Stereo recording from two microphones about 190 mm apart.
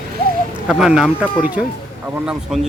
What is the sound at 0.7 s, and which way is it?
Speech, centre (ahead or behind).